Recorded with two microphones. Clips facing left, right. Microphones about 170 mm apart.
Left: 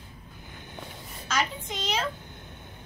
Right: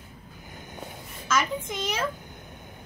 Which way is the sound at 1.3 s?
50° right (ahead or behind).